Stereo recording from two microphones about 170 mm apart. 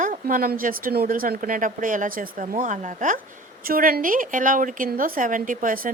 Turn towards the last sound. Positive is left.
turn(degrees=-55)  # may be behind; listen again after turning